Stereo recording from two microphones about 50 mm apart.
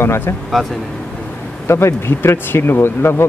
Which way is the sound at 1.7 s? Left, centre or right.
Left.